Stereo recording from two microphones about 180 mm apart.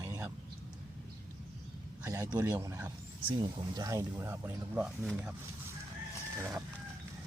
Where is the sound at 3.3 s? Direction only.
25° right (ahead or behind); by 5.3 s 5° right (ahead or behind).